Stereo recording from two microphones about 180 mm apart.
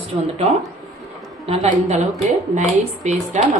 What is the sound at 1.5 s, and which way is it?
A woman's voice, 40° right (ahead or behind).